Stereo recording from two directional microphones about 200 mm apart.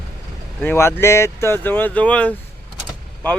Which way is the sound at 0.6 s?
10° left (ahead or behind).